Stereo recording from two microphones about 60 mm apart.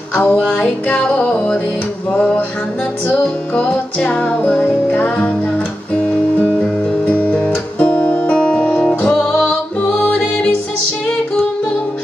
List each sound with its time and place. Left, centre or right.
0.1 s music: left
3.5 s music: left
4.6 s music: left
6.4 s guitar: left
10.0 s music: left